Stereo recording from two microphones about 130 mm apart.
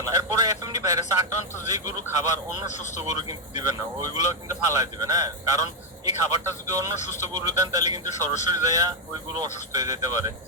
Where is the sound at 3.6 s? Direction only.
30° right (ahead or behind).